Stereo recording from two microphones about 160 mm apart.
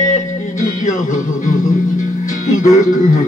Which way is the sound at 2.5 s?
50° left (ahead or behind).